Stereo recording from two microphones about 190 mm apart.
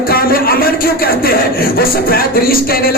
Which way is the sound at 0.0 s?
50° left (ahead or behind).